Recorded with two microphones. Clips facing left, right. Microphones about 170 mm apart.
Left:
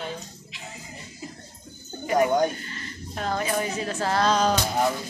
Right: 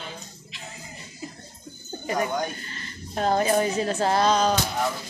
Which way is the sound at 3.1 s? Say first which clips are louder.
Right 5 dB; 35° right (ahead or behind).